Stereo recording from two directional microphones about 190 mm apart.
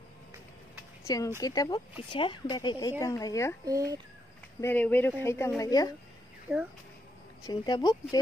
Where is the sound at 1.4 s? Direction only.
20° left (ahead or behind).